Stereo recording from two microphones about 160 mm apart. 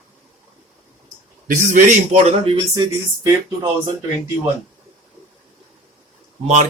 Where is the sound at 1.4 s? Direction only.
55° right (ahead or behind).